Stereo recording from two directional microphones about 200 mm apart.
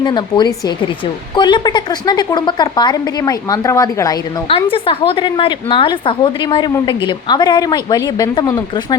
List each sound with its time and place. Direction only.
0.0 s a woman's voice: 20° left (ahead or behind)